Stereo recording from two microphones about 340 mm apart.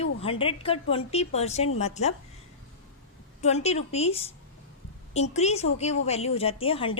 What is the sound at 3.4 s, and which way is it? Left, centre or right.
A woman's voice, centre.